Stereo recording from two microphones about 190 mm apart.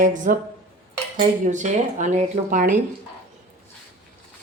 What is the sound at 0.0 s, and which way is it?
Speech, 40° right (ahead or behind).